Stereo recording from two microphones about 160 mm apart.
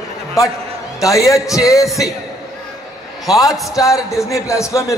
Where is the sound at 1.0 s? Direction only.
20° left (ahead or behind).